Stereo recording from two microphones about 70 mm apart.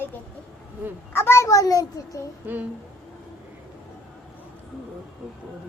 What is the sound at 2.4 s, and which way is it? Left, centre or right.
Speech, right.